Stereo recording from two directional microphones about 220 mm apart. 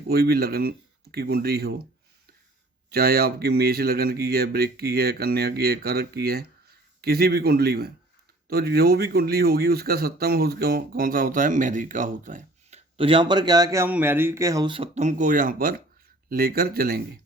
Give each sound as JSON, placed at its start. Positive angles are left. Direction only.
{"t": 0.1, "sound": "speech", "side_deg": -45}
{"t": 2.9, "sound": "speech", "side_deg": -45}